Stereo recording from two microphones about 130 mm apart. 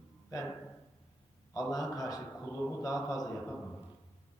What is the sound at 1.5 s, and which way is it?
A man's voice, 30° left (ahead or behind).